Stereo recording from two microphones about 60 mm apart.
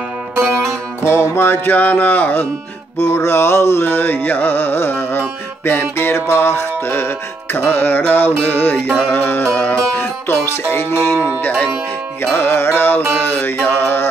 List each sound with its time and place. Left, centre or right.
1.0 s music: left
3.0 s music: left
12.2 s music: left